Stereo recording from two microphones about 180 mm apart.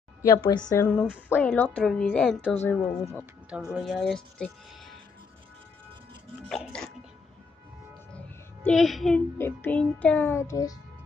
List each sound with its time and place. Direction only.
0.2 s a woman's voice: 20° left (ahead or behind)
0.7 s music: 10° left (ahead or behind)
1.3 s a woman's voice: 10° left (ahead or behind)
2.5 s music: 10° left (ahead or behind)
3.7 s a woman's voice: centre (ahead or behind)
6.5 s a woman's voice: centre (ahead or behind)
8.6 s a woman's voice: centre (ahead or behind)
9.4 s music: 10° left (ahead or behind)